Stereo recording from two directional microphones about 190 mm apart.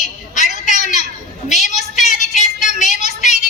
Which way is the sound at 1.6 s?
40° left (ahead or behind).